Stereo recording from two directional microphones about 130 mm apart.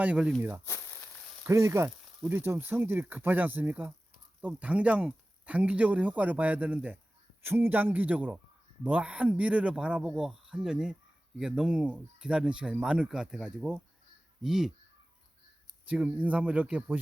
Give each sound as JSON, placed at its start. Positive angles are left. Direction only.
{"t": 0.0, "sound": "speech", "side_deg": -10}
{"t": 0.6, "sound": "a sound", "side_deg": 20}
{"t": 1.5, "sound": "speech", "side_deg": -25}
{"t": 15.9, "sound": "speech", "side_deg": -10}